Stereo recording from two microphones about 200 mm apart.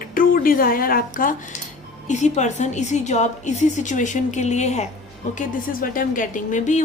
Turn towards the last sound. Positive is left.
turn(degrees=40)  # may be behind; listen again after turning